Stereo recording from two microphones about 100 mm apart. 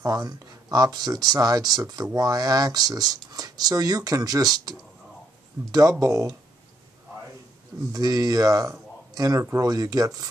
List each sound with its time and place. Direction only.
0.0 s speech: 40° right (ahead or behind)
7.9 s speech: 40° right (ahead or behind)